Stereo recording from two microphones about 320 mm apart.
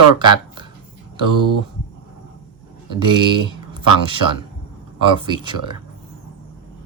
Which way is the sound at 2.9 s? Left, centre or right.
Centre.